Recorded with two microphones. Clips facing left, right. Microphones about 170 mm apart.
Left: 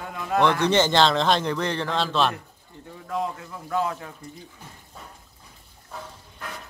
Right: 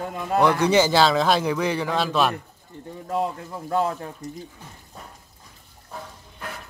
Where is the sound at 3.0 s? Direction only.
35° right (ahead or behind).